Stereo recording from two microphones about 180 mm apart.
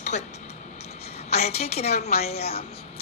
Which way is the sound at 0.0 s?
40° left (ahead or behind).